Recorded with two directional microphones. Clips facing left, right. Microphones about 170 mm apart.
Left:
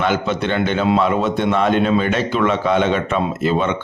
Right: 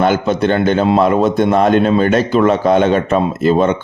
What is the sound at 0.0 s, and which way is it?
Speech, 40° right (ahead or behind).